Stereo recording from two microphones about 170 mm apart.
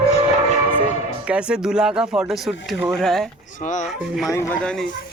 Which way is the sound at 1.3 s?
5° right (ahead or behind).